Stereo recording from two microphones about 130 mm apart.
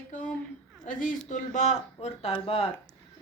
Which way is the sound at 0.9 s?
90° left.